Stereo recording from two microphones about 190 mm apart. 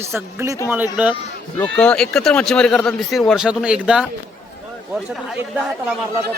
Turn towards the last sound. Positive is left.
turn(degrees=-5)  # may be behind; listen again after turning